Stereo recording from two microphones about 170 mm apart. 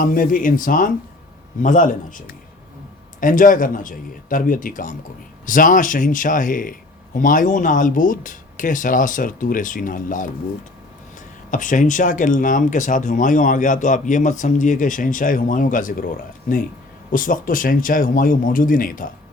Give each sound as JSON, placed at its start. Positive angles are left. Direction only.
{"t": 0.0, "sound": "speech", "side_deg": 55}
{"t": 11.5, "sound": "speech", "side_deg": 50}